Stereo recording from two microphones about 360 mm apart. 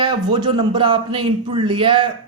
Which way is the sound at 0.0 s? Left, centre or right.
Centre.